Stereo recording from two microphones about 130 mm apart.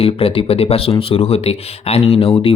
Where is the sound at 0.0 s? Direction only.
45° left (ahead or behind).